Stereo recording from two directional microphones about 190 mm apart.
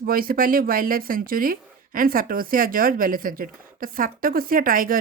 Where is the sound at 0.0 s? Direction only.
50° right (ahead or behind).